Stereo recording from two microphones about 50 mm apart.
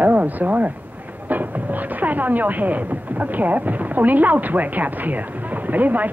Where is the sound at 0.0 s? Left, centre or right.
Right.